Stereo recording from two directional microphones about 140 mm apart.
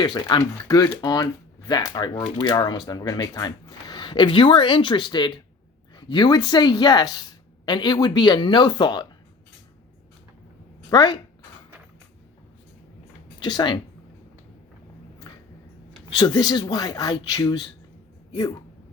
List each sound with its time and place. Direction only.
0.0 s speech: 30° left (ahead or behind)
10.8 s speech: 30° left (ahead or behind)
13.4 s speech: 30° left (ahead or behind)
15.3 s a sound: 30° left (ahead or behind)
16.0 s speech: 30° left (ahead or behind)